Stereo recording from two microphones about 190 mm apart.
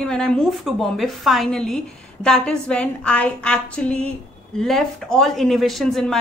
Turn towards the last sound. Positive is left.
turn(degrees=0)  # may be behind; listen again after turning